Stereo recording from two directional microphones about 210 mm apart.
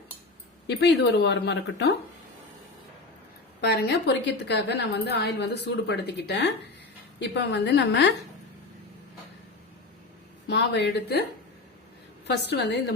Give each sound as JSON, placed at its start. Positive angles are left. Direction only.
{"t": 0.7, "sound": "a woman's voice", "side_deg": 55}
{"t": 3.6, "sound": "a woman's voice", "side_deg": 50}
{"t": 10.5, "sound": "a woman's voice", "side_deg": 55}
{"t": 12.3, "sound": "a woman's voice", "side_deg": 55}